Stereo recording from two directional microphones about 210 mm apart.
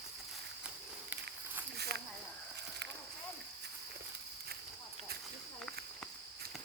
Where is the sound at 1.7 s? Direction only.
50° right (ahead or behind).